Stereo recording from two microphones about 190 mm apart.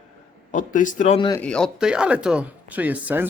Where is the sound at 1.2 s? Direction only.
20° left (ahead or behind).